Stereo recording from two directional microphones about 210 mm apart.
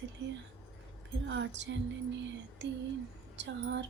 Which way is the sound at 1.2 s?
60° right (ahead or behind).